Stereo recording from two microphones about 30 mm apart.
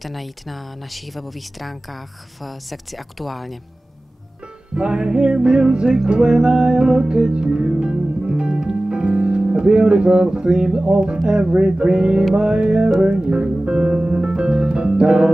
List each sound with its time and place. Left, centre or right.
0.0 s speech: centre
4.7 s music: right
13.1 s speech: right